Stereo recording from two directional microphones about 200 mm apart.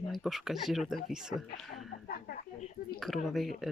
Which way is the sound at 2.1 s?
45° left (ahead or behind).